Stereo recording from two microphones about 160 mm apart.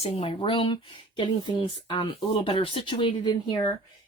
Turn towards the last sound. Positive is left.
turn(degrees=25)  # may be behind; listen again after turning